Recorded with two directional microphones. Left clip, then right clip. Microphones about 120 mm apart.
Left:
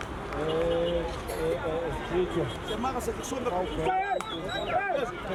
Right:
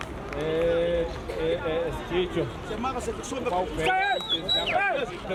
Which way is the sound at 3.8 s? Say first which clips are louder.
Right 4 dB; 35° right (ahead or behind).